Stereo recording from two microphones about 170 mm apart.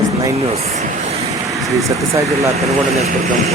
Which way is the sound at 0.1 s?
20° right (ahead or behind).